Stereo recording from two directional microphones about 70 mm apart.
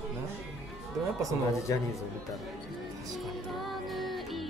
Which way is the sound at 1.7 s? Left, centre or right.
Left.